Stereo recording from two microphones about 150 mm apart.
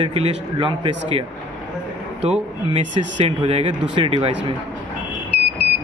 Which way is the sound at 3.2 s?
35° right (ahead or behind).